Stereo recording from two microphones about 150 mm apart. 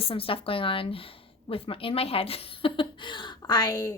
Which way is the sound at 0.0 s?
40° left (ahead or behind).